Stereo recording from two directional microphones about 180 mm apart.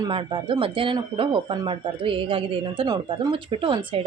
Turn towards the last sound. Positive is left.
turn(degrees=-30)  # may be behind; listen again after turning